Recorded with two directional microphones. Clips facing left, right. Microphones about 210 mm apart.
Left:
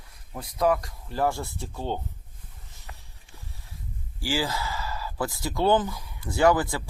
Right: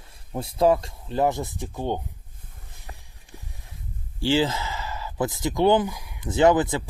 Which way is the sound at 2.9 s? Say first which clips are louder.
Right 5 dB; 15° right (ahead or behind).